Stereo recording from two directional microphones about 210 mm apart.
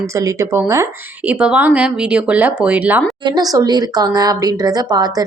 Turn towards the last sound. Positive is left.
turn(degrees=-20)  # may be behind; listen again after turning